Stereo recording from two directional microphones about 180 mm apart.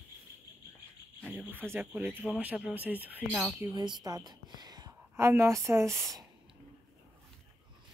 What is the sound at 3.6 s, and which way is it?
A woman's voice, 25° right (ahead or behind).